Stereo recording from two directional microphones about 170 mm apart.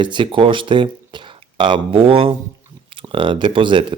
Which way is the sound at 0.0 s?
30° right (ahead or behind).